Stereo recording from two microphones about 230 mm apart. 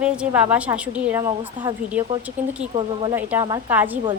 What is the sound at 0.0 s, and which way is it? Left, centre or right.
A woman's voice, centre.